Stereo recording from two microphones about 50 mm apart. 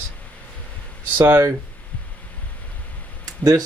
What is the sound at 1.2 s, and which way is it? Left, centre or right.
Speech, right.